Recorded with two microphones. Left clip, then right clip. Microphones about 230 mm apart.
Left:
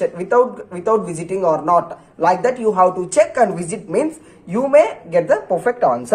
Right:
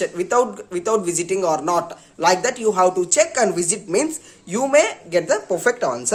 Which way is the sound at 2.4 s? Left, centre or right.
Right.